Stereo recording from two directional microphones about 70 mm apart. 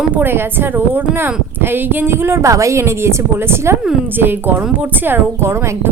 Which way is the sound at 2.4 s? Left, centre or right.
Right.